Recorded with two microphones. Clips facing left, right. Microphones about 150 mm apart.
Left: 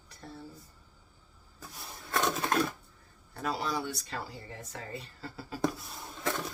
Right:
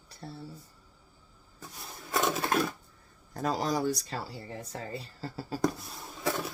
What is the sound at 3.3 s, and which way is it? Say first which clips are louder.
Speech: right 4 dB; 40° right (ahead or behind).